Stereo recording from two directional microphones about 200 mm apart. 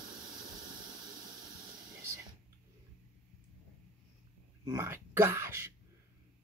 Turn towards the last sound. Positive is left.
turn(degrees=-10)  # may be behind; listen again after turning